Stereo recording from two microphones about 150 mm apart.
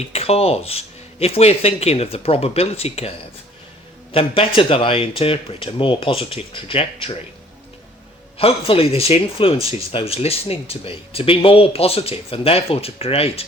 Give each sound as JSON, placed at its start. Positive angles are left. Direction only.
{"t": 0.0, "sound": "speech", "side_deg": 45}
{"t": 8.4, "sound": "speech", "side_deg": 40}